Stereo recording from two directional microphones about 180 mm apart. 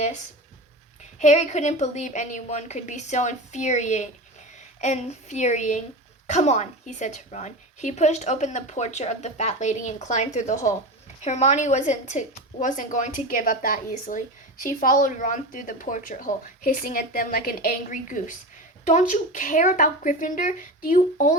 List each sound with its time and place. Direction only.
1.2 s a woman's voice: 40° left (ahead or behind)